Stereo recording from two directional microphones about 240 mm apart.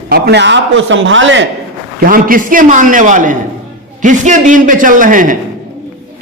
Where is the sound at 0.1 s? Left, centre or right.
Right.